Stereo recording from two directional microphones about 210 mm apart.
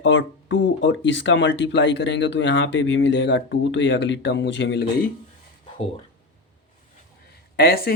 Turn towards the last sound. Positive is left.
turn(degrees=45)  # may be behind; listen again after turning